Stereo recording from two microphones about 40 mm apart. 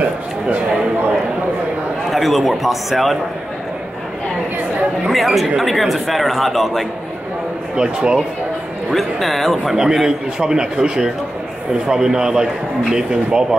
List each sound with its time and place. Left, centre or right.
2.0 s speech: centre
5.1 s speech: centre
7.7 s speech: right
8.9 s speech: centre
9.9 s a man's voice: centre